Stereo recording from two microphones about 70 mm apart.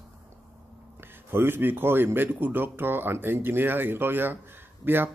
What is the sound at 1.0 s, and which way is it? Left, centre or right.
Speech, right.